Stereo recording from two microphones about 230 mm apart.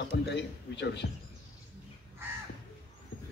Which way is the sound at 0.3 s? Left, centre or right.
Left.